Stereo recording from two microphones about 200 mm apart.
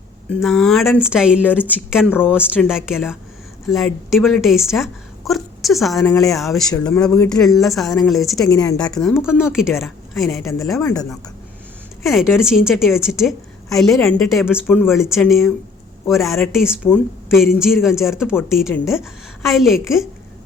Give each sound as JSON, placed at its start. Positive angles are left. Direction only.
{"t": 0.3, "sound": "a woman's voice", "side_deg": 0}
{"t": 6.0, "sound": "speech", "side_deg": 15}
{"t": 6.2, "sound": "a woman's voice", "side_deg": 0}
{"t": 8.4, "sound": "a woman's voice", "side_deg": 20}
{"t": 8.8, "sound": "a woman's voice", "side_deg": 5}
{"t": 12.0, "sound": "a woman's voice", "side_deg": 0}